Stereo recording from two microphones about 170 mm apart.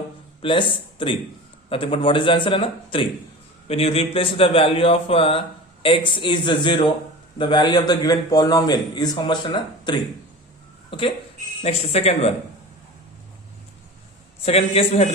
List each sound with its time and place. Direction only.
0.4 s a man's voice: 30° left (ahead or behind)
10.9 s a man's voice: 30° left (ahead or behind)
14.4 s a man's voice: 35° left (ahead or behind)